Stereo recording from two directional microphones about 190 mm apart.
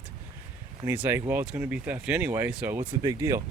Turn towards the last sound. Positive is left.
turn(degrees=-15)  # may be behind; listen again after turning